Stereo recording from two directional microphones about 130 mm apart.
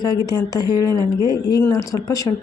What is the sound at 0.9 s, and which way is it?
Speech, 30° right (ahead or behind).